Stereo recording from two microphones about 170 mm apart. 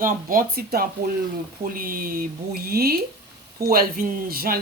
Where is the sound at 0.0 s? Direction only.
55° right (ahead or behind).